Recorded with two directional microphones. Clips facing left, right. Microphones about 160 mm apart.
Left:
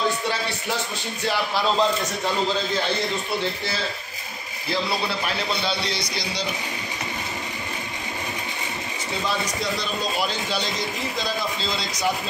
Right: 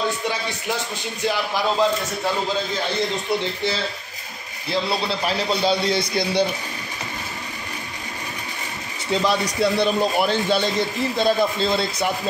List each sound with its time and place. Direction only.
5.6 s a man's voice: 45° right (ahead or behind)
9.2 s a man's voice: 65° right (ahead or behind)